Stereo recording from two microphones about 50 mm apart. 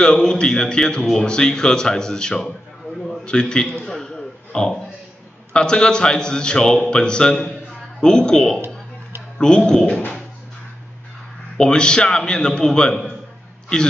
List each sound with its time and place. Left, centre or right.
0.0 s a man's voice: centre
3.9 s a sound: centre
4.5 s a man's voice: centre
8.5 s a sound: right
9.4 s a man's voice: centre
9.8 s speech: left
11.5 s a man's voice: centre